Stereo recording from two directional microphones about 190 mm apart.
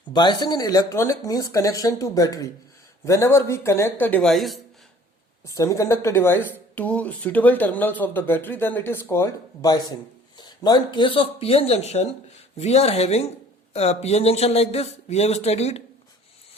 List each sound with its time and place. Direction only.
0.1 s a woman's voice: 25° left (ahead or behind); by 4.6 s centre (ahead or behind)
5.5 s a man's voice: 15° left (ahead or behind); by 15.8 s 35° left (ahead or behind)